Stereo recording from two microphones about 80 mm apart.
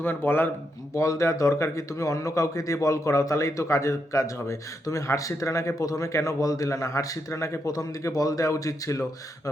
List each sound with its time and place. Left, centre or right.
0.0 s speech: left
0.9 s a man's voice: left